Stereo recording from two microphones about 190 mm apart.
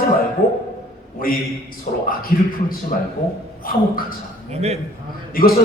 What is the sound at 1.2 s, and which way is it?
A man's voice, 50° left (ahead or behind).